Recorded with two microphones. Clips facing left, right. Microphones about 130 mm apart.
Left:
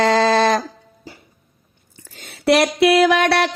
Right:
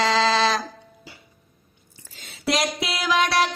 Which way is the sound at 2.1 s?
60° left (ahead or behind).